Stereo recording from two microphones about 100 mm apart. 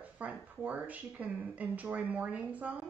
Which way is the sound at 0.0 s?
15° right (ahead or behind).